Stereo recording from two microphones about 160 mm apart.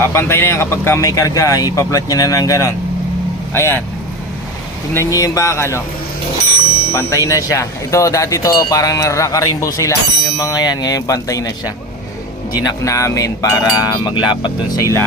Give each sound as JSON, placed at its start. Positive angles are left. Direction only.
{"t": 0.1, "sound": "speech", "side_deg": 15}
{"t": 4.9, "sound": "speech", "side_deg": 20}
{"t": 6.9, "sound": "speech", "side_deg": 20}